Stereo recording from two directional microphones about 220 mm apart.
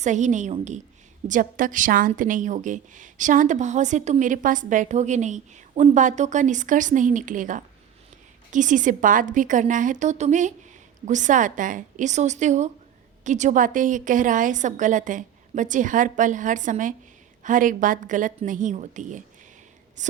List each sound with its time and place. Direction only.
0.0 s a woman's voice: 35° right (ahead or behind)